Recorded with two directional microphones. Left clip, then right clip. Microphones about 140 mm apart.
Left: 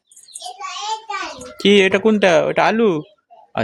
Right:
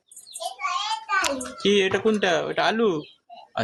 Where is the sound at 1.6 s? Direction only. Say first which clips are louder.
Left 7 dB; 70° left (ahead or behind); by 3.0 s 50° left (ahead or behind).